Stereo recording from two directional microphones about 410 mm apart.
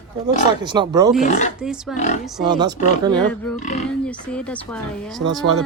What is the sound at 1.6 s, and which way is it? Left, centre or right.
Speech, centre.